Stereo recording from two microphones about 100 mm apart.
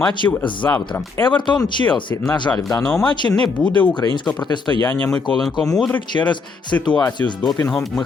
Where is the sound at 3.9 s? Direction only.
50° left (ahead or behind).